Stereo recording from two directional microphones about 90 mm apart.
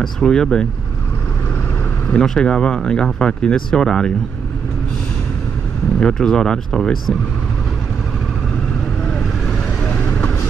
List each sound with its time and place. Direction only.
0.0 s speech: 5° left (ahead or behind)
2.0 s speech: 10° left (ahead or behind)
5.9 s speech: 5° left (ahead or behind)
9.8 s vehicle: 20° left (ahead or behind)